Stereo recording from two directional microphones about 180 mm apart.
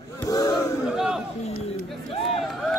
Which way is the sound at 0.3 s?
20° left (ahead or behind).